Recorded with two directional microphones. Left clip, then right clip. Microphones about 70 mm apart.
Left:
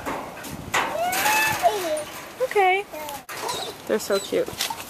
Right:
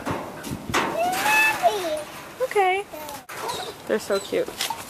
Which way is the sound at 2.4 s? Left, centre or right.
Centre.